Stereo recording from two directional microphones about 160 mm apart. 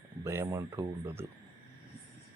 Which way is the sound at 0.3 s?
15° right (ahead or behind).